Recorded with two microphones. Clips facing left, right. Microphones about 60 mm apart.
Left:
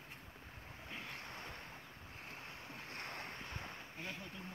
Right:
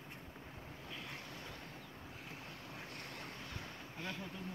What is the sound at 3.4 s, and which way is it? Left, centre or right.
Boat, left.